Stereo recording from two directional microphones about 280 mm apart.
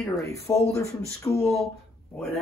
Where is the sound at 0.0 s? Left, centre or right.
Centre.